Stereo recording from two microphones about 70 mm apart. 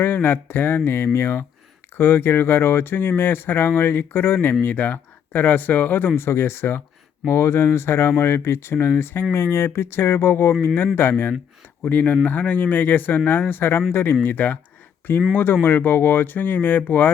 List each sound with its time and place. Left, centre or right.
0.0 s speech: left